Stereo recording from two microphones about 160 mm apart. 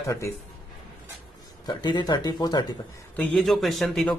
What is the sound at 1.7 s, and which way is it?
Speech, 30° left (ahead or behind).